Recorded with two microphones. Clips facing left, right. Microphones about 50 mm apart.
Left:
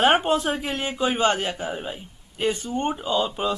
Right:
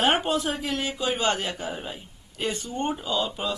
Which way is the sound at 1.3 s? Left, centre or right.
Centre.